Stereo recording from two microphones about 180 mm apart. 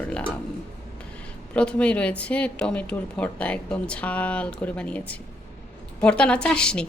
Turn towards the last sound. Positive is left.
turn(degrees=5)  # may be behind; listen again after turning